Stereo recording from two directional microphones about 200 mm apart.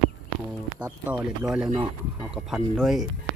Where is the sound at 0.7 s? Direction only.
10° right (ahead or behind).